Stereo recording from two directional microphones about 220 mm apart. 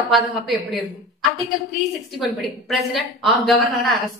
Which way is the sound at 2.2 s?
Centre (ahead or behind).